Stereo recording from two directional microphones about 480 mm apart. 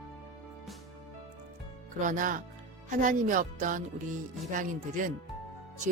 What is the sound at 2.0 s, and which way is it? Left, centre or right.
Speech, centre.